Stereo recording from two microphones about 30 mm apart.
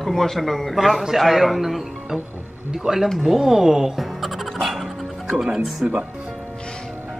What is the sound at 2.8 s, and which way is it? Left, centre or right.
Speech, right.